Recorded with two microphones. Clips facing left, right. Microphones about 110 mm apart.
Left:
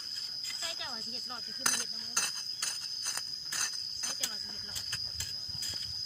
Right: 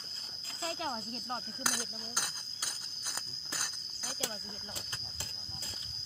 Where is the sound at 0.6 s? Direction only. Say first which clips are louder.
Right 8 dB; 40° right (ahead or behind).